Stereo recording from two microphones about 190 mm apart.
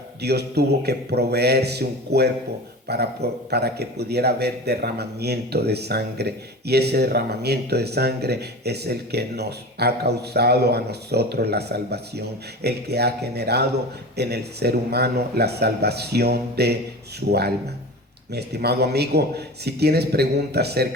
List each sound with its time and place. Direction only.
0.2 s a man's voice: 60° right (ahead or behind)